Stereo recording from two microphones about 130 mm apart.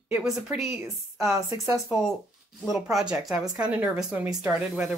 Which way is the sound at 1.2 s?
20° right (ahead or behind).